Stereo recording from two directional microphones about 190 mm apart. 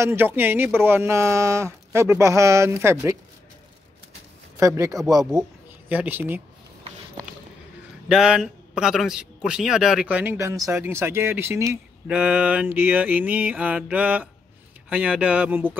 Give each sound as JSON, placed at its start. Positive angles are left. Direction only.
{"t": 0.0, "sound": "a man's voice", "side_deg": -10}
{"t": 4.6, "sound": "a man's voice", "side_deg": -15}
{"t": 8.1, "sound": "a man's voice", "side_deg": -5}